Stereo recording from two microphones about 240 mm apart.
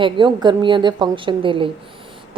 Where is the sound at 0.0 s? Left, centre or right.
Centre.